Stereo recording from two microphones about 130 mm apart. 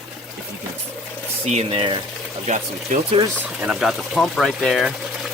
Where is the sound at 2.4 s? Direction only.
70° right (ahead or behind).